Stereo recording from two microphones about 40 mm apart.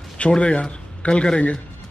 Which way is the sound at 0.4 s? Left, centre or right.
Left.